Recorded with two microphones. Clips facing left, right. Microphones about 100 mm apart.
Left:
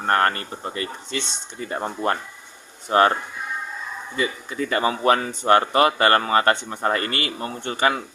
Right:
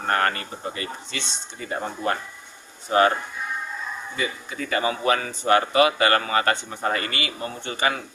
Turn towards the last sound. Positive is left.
turn(degrees=50)  # may be behind; listen again after turning